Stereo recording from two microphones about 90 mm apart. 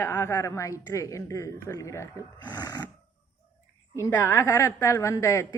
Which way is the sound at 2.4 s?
45° left (ahead or behind).